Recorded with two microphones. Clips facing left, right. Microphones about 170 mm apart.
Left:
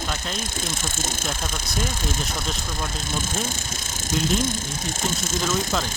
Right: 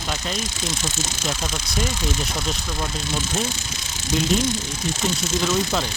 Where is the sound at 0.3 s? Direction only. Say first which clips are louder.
Right 2 dB; 50° left (ahead or behind).